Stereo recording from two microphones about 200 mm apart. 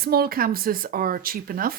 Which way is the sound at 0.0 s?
50° right (ahead or behind).